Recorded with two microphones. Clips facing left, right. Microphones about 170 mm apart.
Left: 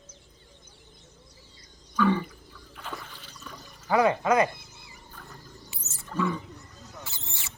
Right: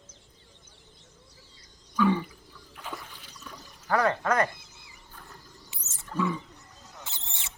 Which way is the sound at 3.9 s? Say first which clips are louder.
Left 3 dB; 10° left (ahead or behind).